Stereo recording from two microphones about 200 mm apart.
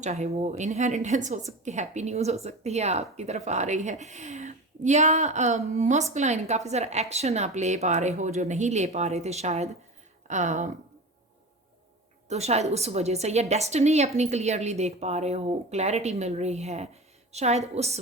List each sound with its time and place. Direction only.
0.0 s a woman's voice: 35° right (ahead or behind)
12.3 s a woman's voice: 35° right (ahead or behind)